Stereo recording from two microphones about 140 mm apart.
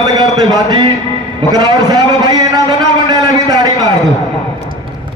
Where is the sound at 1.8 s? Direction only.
25° right (ahead or behind).